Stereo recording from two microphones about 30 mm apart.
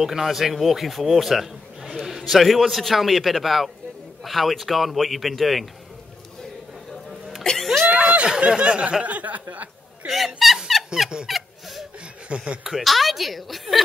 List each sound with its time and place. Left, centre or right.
0.0 s a man's voice: centre
7.1 s cough: centre
7.8 s a sound: right
9.0 s speech: right
10.0 s speech: centre
11.2 s fowl: centre
12.3 s speech: right
12.6 s a man's voice: centre